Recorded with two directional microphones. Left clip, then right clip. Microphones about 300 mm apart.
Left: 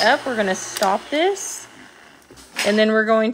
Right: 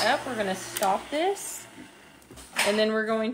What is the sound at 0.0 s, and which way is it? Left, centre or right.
Speech, left.